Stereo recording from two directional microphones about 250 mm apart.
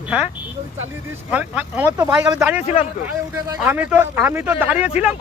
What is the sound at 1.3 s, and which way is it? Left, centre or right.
A man's voice, centre.